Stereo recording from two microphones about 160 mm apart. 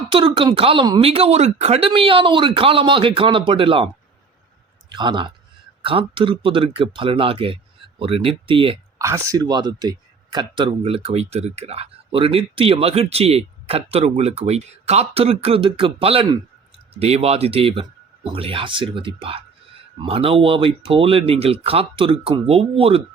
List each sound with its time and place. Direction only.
0.1 s speech: 35° right (ahead or behind)
4.9 s speech: 30° right (ahead or behind)
9.0 s speech: 20° right (ahead or behind); by 23.0 s 35° right (ahead or behind)